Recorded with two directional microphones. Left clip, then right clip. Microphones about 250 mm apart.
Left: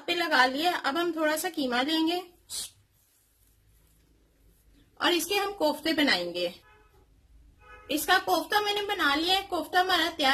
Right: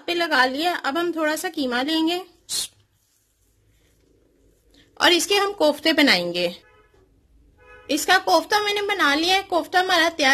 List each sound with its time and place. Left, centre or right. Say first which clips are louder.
0.0 s a woman's voice: right 4 dB; right
4.9 s a woman's voice: right 9 dB; right
8.1 s a woman's voice: right 7 dB; right